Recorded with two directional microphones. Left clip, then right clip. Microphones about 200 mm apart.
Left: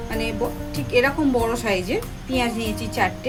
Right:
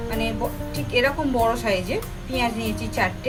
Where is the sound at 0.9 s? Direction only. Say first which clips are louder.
Left 2 dB; 35° left (ahead or behind).